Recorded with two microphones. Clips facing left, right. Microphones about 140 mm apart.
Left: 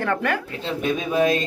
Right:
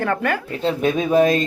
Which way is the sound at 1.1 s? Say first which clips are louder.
Right 4 dB; 40° right (ahead or behind).